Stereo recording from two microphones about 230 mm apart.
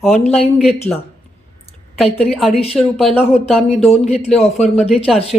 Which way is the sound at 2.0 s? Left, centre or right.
Left.